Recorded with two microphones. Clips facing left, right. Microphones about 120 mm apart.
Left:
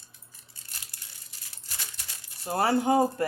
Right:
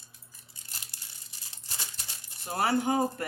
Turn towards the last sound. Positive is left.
turn(degrees=30)  # may be behind; listen again after turning